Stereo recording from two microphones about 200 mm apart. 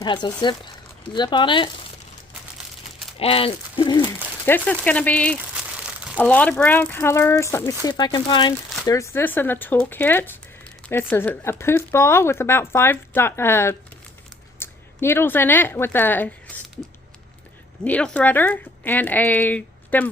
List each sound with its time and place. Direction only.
0.0 s speech: 20° left (ahead or behind)
3.2 s speech: 30° left (ahead or behind)
4.4 s speech: 10° left (ahead or behind)
5.7 s crumpling: 5° right (ahead or behind)
6.1 s speech: 10° left (ahead or behind)
17.8 s speech: 5° left (ahead or behind)